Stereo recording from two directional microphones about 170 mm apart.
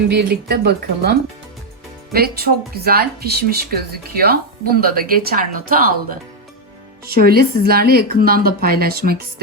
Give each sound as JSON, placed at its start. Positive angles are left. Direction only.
{"t": 0.1, "sound": "speech", "side_deg": -70}
{"t": 2.1, "sound": "speech", "side_deg": -65}